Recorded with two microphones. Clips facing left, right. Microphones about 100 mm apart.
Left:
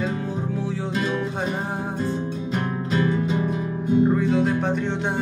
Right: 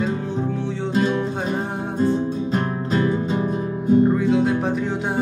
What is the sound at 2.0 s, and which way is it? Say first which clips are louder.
Music: right 6 dB; 35° right (ahead or behind).